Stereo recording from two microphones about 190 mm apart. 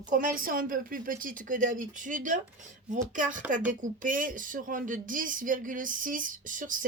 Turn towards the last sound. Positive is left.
turn(degrees=-45)  # may be behind; listen again after turning